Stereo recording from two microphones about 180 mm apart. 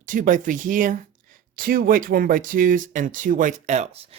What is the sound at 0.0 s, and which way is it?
Speech, 45° right (ahead or behind).